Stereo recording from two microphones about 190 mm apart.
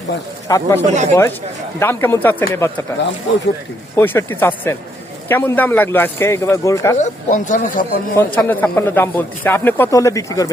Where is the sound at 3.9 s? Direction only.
10° left (ahead or behind).